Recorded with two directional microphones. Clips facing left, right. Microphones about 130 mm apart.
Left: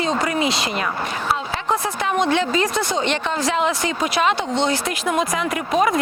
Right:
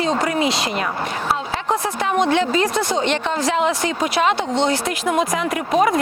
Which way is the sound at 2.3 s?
50° right (ahead or behind).